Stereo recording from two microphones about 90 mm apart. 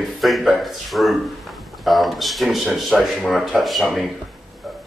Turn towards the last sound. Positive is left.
turn(degrees=0)  # may be behind; listen again after turning